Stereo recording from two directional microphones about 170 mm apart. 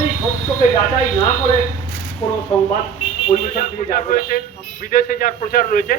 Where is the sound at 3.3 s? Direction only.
50° left (ahead or behind).